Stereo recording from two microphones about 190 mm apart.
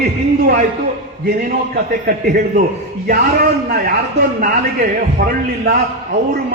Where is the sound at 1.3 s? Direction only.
50° right (ahead or behind).